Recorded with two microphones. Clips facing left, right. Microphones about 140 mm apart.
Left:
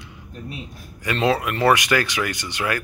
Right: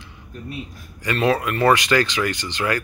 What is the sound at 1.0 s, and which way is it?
Speech, 15° left (ahead or behind).